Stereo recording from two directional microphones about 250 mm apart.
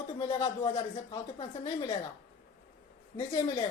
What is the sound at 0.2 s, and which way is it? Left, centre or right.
Speech, centre.